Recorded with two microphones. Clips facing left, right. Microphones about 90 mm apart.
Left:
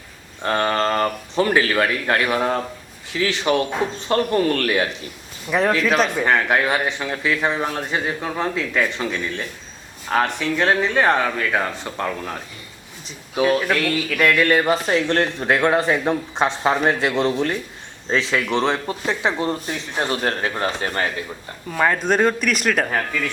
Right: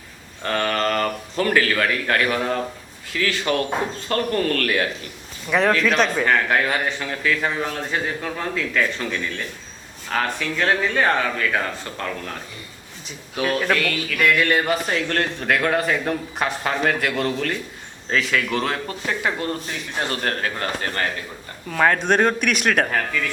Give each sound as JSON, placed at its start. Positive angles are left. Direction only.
{"t": 0.4, "sound": "speech", "side_deg": 25}
{"t": 5.5, "sound": "speech", "side_deg": 5}
{"t": 6.1, "sound": "a man's voice", "side_deg": 15}
{"t": 13.3, "sound": "speech", "side_deg": 20}
{"t": 14.8, "sound": "speech", "side_deg": 30}
{"t": 21.7, "sound": "speech", "side_deg": 5}
{"t": 22.9, "sound": "a man's voice", "side_deg": 15}